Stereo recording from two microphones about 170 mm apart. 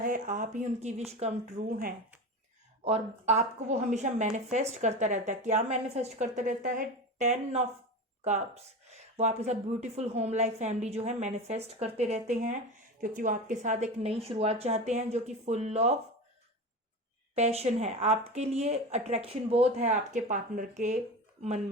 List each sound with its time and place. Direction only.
0.0 s a woman's voice: 50° right (ahead or behind)
2.8 s a woman's voice: 40° right (ahead or behind)
17.3 s speech: 40° right (ahead or behind)